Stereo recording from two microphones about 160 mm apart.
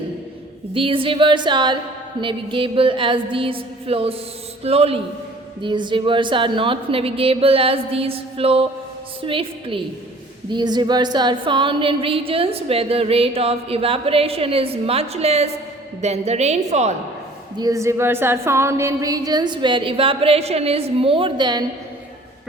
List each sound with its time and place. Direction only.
0.7 s a woman's voice: 35° right (ahead or behind)
17.6 s a woman's voice: 20° right (ahead or behind)